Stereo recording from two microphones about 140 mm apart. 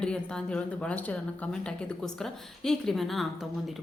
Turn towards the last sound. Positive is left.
turn(degrees=0)  # may be behind; listen again after turning